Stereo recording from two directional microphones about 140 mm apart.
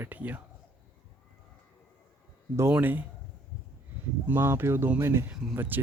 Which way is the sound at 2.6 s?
15° right (ahead or behind).